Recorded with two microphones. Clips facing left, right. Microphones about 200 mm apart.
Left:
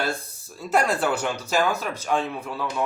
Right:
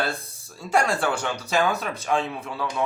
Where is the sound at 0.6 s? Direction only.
5° left (ahead or behind).